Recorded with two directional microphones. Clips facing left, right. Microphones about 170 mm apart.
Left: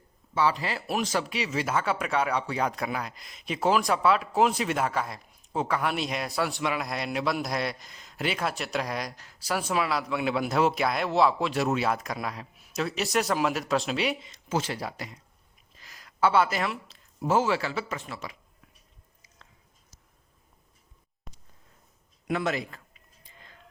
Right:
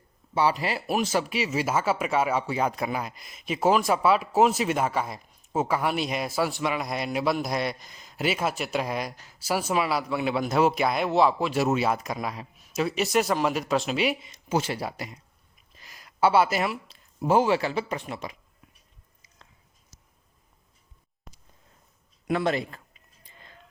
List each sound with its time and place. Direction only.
0.3 s a man's voice: 15° right (ahead or behind)
21.3 s a sound: centre (ahead or behind)
22.3 s a man's voice: 35° right (ahead or behind)